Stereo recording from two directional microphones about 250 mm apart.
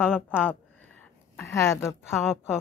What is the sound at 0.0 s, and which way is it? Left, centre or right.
Speech, centre.